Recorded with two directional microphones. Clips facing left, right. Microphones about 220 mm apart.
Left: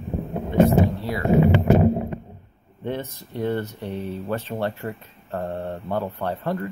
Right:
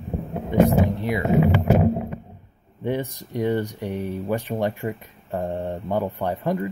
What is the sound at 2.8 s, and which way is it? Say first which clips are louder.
Speech: right 3 dB; 15° right (ahead or behind).